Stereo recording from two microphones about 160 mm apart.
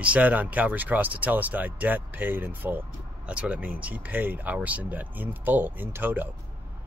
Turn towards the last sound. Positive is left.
turn(degrees=-10)  # may be behind; listen again after turning